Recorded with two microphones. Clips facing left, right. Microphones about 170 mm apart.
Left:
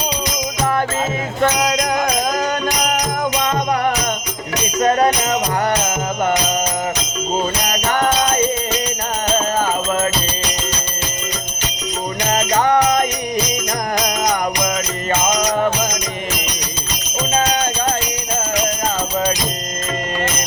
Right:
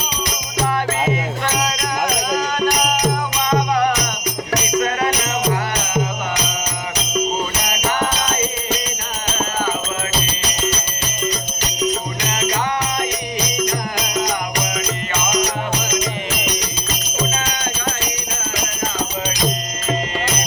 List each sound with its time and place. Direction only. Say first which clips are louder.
1.4 s music: left 5 dB; 50° left (ahead or behind)
7.7 s music: left 2 dB; 50° left (ahead or behind)
12.3 s music: left 6 dB; 45° left (ahead or behind)